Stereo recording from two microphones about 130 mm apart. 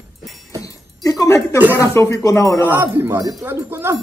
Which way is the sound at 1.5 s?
15° right (ahead or behind).